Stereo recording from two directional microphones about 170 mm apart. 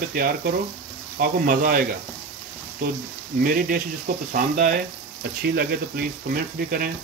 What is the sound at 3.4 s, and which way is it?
Speech, 60° right (ahead or behind).